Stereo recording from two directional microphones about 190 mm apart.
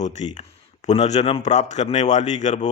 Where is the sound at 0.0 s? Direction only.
40° left (ahead or behind).